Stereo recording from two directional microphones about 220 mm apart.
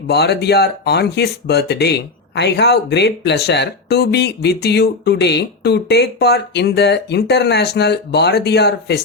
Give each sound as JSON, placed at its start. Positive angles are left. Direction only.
{"t": 0.1, "sound": "speech", "side_deg": 50}